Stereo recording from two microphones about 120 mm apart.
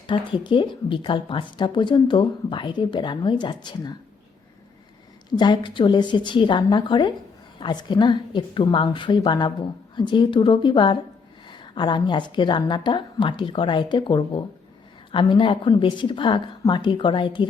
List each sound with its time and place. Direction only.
0.1 s a woman's voice: 45° left (ahead or behind)
5.4 s a woman's voice: 40° left (ahead or behind)